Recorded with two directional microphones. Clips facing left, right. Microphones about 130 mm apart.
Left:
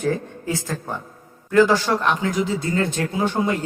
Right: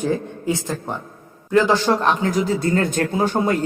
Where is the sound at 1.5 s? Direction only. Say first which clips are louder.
Even; 20° right (ahead or behind).